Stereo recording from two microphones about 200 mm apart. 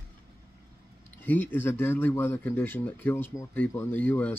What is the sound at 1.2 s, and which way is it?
Speech, 10° left (ahead or behind).